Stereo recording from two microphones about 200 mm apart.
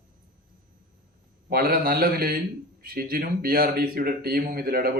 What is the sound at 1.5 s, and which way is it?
Speech, 50° right (ahead or behind).